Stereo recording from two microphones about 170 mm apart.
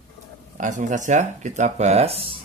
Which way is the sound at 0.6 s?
50° right (ahead or behind).